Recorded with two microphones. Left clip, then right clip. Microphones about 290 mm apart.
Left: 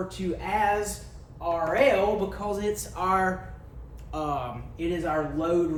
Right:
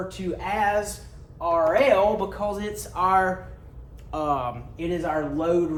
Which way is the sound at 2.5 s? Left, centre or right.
Right.